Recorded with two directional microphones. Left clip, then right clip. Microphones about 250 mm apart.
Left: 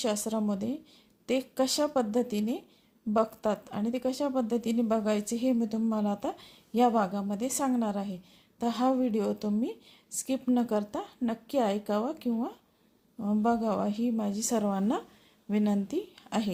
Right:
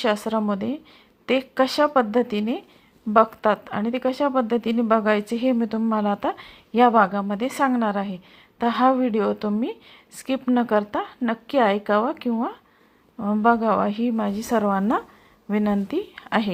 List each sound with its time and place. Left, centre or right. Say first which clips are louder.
0.0 s a woman's voice: right 8 dB; centre
13.1 s speech: right 7 dB; centre
13.4 s a woman's voice: right 10 dB; centre